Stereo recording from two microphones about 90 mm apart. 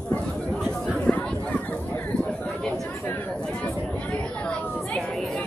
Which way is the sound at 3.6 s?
10° left (ahead or behind).